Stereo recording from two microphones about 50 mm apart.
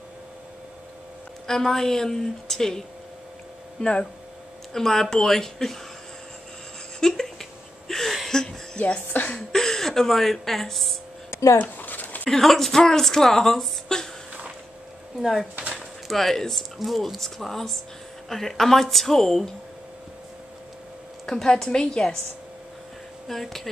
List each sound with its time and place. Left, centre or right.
1.5 s speech: centre
3.8 s speech: centre
7.0 s a sound: centre
8.7 s speech: left
9.5 s a woman's voice: centre
11.5 s a sound: left
12.3 s speech: centre
15.1 s speech: centre
15.7 s a sound: centre
16.7 s speech: centre
21.3 s speech: centre
23.2 s speech: centre